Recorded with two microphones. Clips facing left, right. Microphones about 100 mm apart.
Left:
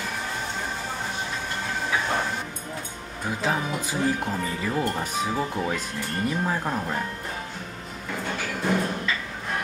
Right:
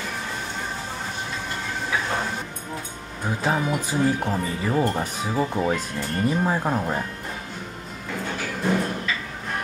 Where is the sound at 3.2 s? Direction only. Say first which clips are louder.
Right 3 dB; 15° right (ahead or behind).